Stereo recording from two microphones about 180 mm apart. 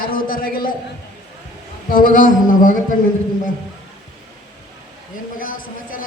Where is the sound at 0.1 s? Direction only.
55° left (ahead or behind).